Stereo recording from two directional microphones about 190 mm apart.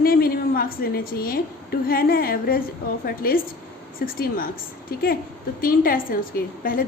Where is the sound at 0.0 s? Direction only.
50° left (ahead or behind).